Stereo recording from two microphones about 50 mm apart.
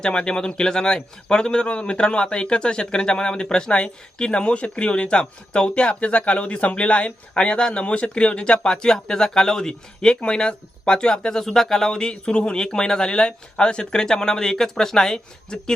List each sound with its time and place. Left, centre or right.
0.0 s a man's voice: centre